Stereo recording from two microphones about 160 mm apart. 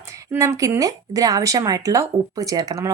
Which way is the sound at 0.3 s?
20° right (ahead or behind).